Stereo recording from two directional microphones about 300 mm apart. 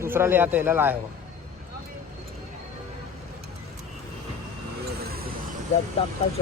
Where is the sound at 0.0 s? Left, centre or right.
Centre.